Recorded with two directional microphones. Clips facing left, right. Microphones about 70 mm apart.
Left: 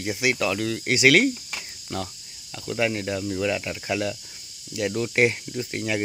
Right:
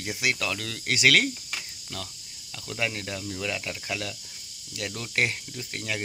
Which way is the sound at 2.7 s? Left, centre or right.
Centre.